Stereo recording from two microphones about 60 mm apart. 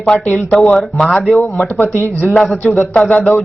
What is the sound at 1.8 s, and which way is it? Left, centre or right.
Speech, left.